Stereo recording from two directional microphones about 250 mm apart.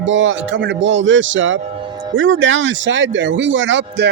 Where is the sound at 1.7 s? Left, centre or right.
Centre.